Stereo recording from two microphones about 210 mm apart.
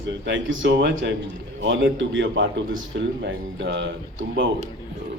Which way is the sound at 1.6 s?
60° right (ahead or behind).